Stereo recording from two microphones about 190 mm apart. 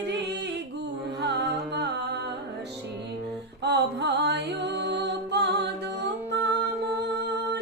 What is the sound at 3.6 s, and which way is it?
Music, 60° right (ahead or behind).